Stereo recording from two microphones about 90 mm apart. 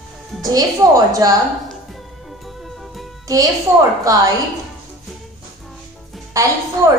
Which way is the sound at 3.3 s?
40° right (ahead or behind).